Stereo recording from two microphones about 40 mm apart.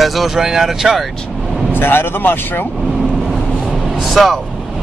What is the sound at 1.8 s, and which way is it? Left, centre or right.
Speech, left.